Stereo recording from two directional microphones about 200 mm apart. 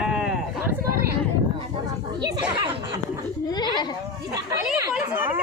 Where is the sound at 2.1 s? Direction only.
20° right (ahead or behind).